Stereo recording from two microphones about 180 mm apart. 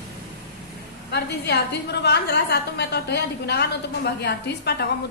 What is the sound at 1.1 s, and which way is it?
A woman's voice, 65° left (ahead or behind).